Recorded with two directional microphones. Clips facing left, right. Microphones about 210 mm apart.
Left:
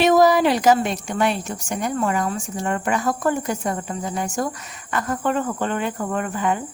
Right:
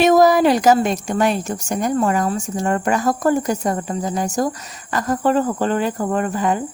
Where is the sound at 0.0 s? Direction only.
45° right (ahead or behind).